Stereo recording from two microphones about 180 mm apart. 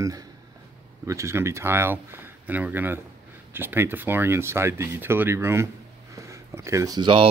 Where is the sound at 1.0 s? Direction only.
15° right (ahead or behind).